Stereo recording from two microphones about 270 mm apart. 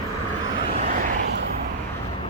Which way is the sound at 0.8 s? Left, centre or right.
Right.